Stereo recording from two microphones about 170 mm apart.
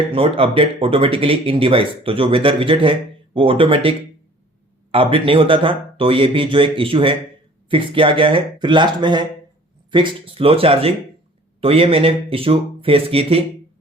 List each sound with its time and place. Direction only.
0.1 s speech: 35° right (ahead or behind)